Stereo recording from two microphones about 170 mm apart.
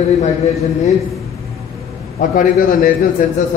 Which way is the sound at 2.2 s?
55° left (ahead or behind).